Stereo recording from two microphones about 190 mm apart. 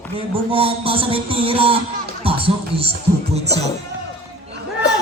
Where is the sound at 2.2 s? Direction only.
30° right (ahead or behind).